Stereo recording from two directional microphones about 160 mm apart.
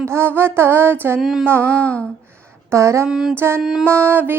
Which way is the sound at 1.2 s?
Centre (ahead or behind).